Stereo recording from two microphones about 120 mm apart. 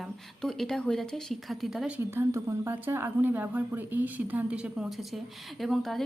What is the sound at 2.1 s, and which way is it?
Speech, 25° right (ahead or behind).